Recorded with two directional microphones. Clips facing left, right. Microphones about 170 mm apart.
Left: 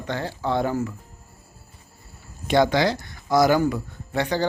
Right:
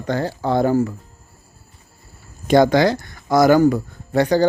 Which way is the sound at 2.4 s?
45° right (ahead or behind).